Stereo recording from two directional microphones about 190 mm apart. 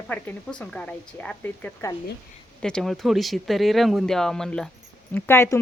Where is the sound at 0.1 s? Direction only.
10° left (ahead or behind).